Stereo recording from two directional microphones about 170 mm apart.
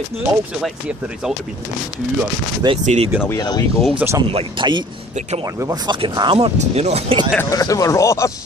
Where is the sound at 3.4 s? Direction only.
25° left (ahead or behind).